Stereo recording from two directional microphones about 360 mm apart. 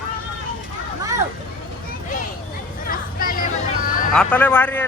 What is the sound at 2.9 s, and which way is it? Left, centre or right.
Music, left.